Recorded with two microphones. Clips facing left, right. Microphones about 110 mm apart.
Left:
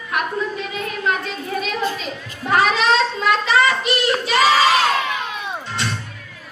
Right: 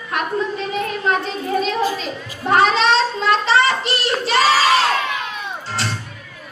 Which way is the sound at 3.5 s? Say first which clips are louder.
Even; 30° right (ahead or behind).